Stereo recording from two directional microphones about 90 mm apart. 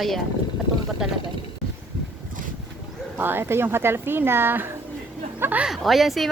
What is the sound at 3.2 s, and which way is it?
A woman's voice, 25° right (ahead or behind).